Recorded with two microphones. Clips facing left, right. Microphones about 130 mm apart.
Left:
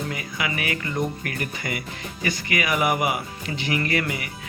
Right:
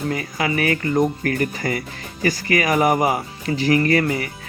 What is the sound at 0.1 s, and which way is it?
Speech, 40° right (ahead or behind).